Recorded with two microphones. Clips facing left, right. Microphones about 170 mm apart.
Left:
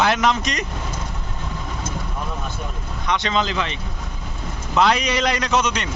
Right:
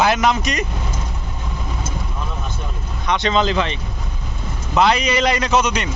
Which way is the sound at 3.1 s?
25° right (ahead or behind).